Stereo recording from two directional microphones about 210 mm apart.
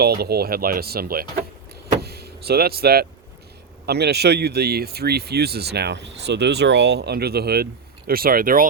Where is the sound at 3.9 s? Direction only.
50° right (ahead or behind).